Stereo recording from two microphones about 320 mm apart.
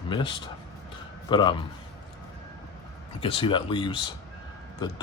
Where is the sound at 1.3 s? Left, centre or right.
Centre.